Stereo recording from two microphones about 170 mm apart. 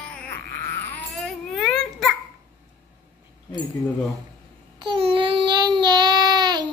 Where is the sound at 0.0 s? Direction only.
5° left (ahead or behind).